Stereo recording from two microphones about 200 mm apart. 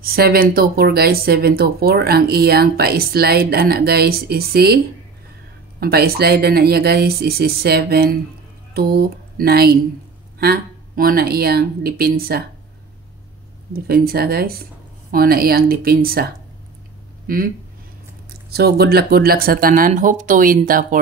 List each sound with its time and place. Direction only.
0.0 s speech: 50° right (ahead or behind)
5.8 s speech: 50° right (ahead or behind)
13.7 s speech: 50° right (ahead or behind)
17.3 s speech: 45° right (ahead or behind)